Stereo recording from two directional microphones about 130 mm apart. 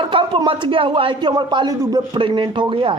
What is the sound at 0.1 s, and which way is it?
A man's voice, 40° right (ahead or behind).